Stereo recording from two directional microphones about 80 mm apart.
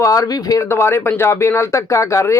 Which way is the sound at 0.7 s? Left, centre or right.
Left.